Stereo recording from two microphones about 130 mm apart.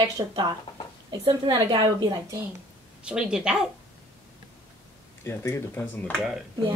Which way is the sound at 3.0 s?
5° right (ahead or behind).